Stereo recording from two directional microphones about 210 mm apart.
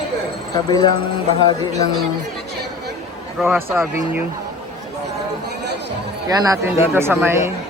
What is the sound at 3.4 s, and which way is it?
Speech, 10° right (ahead or behind).